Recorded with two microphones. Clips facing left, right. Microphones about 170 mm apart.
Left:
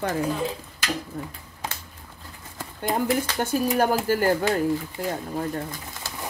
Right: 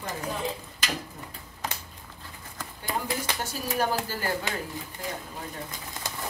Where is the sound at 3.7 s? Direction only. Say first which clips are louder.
Left 4 dB; 50° left (ahead or behind).